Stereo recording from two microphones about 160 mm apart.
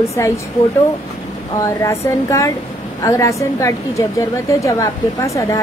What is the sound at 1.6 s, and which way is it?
Speech, 20° left (ahead or behind).